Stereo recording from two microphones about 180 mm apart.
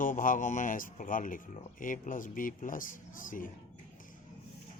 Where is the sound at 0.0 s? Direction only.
50° left (ahead or behind).